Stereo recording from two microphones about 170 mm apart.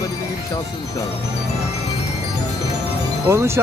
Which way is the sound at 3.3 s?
15° right (ahead or behind).